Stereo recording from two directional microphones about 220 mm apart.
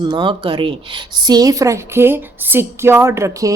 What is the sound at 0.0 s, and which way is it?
A woman's voice, 20° right (ahead or behind).